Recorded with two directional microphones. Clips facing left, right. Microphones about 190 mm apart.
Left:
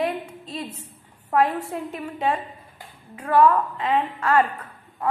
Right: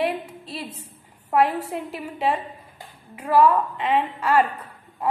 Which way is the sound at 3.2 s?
10° right (ahead or behind).